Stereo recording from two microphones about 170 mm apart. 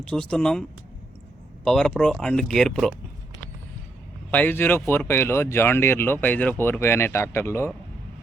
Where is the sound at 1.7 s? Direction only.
5° left (ahead or behind).